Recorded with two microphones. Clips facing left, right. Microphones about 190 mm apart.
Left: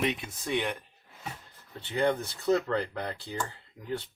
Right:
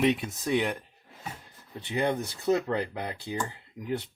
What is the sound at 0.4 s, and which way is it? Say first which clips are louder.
Speech: right 4 dB; 20° right (ahead or behind).